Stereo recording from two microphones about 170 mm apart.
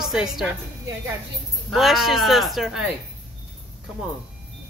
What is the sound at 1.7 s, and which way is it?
A woman's voice, centre (ahead or behind).